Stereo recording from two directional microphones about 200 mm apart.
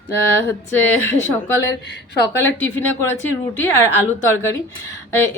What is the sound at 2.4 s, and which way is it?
A woman's voice, 10° left (ahead or behind).